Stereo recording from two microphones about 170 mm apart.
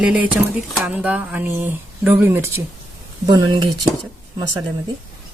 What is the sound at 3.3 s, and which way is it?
Speech, 25° right (ahead or behind).